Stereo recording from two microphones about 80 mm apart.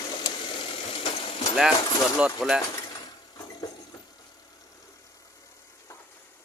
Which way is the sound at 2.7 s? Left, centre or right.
Left.